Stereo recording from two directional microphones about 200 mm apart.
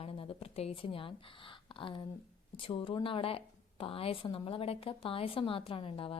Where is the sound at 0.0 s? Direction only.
30° left (ahead or behind).